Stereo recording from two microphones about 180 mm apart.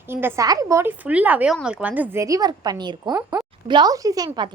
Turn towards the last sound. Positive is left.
turn(degrees=-20)  # may be behind; listen again after turning